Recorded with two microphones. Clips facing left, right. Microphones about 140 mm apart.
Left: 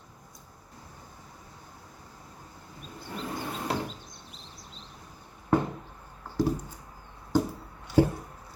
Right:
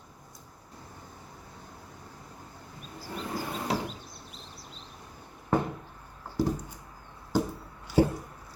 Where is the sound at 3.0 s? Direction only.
5° right (ahead or behind).